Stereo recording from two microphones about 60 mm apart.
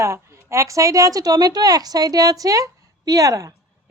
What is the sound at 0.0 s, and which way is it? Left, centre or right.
A woman's voice, right.